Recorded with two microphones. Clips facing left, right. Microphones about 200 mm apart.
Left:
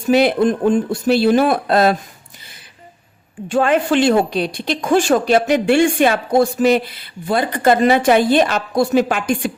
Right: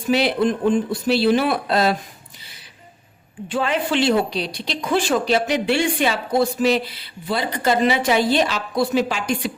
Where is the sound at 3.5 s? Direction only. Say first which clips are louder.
Left 6 dB; 50° left (ahead or behind).